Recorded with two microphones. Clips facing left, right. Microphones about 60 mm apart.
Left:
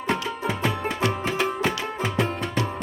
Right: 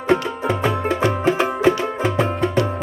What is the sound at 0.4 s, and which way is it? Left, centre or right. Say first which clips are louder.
Music: right 6 dB; right.